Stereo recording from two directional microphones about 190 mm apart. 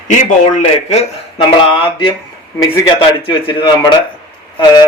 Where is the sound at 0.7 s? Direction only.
30° left (ahead or behind).